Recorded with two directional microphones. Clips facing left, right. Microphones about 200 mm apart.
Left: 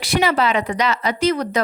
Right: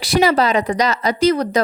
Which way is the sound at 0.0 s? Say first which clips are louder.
Right 3 dB; 40° right (ahead or behind).